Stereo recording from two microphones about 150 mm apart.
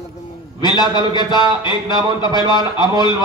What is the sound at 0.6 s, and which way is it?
A man's voice, 30° left (ahead or behind).